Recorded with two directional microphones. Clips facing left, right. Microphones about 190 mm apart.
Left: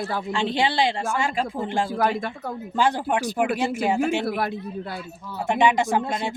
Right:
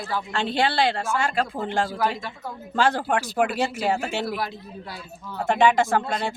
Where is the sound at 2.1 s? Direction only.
55° left (ahead or behind).